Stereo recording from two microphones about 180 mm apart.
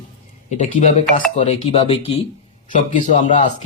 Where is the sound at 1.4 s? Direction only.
35° left (ahead or behind).